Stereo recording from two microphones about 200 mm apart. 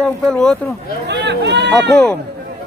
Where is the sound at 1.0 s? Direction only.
60° right (ahead or behind).